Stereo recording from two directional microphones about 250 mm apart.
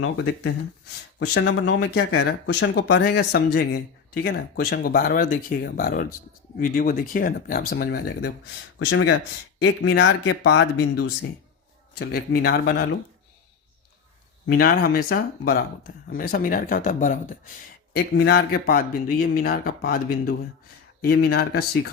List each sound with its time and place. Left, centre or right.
0.0 s speech: left
11.9 s speech: left
14.4 s speech: left